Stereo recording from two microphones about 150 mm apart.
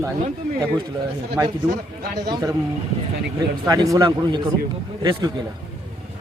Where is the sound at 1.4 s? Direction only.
20° right (ahead or behind).